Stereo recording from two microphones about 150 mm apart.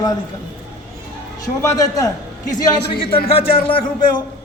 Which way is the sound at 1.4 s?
20° left (ahead or behind).